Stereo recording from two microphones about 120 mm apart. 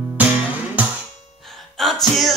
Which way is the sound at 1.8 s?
Centre (ahead or behind).